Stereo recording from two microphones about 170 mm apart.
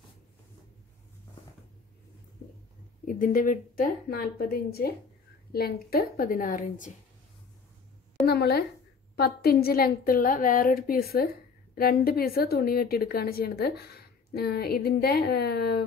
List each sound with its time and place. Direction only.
3.1 s a woman's voice: 55° left (ahead or behind)
8.3 s a woman's voice: 65° left (ahead or behind)